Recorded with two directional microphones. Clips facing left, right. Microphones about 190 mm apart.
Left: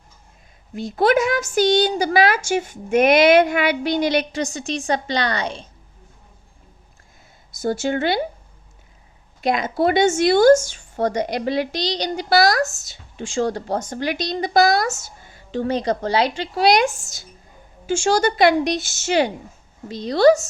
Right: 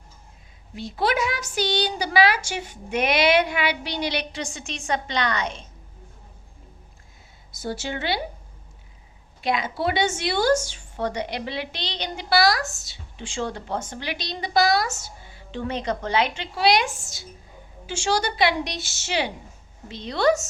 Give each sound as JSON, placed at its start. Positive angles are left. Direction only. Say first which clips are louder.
{"t": 0.7, "sound": "speech", "louder": "left 7 dB", "side_deg": 45}
{"t": 7.5, "sound": "speech", "louder": "left 8 dB", "side_deg": 50}
{"t": 9.4, "sound": "a woman's voice", "louder": "left 6 dB", "side_deg": 45}